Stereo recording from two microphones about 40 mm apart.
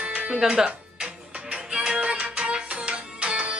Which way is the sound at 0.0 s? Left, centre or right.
Right.